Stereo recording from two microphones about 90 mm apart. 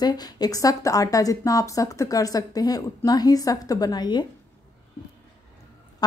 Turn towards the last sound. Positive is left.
turn(degrees=50)  # may be behind; listen again after turning